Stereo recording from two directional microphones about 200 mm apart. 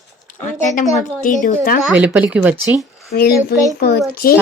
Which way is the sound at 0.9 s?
40° left (ahead or behind).